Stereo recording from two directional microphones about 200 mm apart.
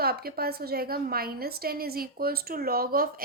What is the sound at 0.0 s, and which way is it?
A woman's voice, 50° right (ahead or behind).